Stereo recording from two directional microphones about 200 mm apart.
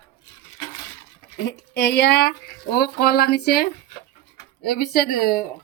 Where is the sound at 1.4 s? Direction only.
55° left (ahead or behind).